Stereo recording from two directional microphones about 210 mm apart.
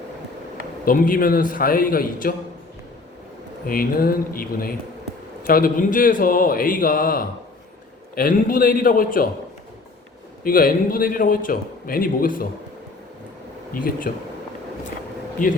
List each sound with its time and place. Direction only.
0.9 s a man's voice: 40° left (ahead or behind)
3.7 s a man's voice: 45° left (ahead or behind)
10.4 s a man's voice: 45° left (ahead or behind)
13.7 s speech: 40° left (ahead or behind)
15.4 s speech: 40° left (ahead or behind)